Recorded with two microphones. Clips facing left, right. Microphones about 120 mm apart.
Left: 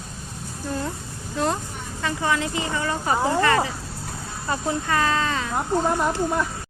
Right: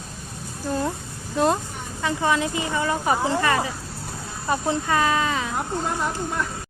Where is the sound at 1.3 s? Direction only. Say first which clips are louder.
Right 4 dB; 20° right (ahead or behind).